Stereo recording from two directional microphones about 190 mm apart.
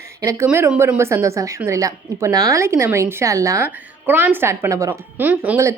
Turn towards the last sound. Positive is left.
turn(degrees=-10)  # may be behind; listen again after turning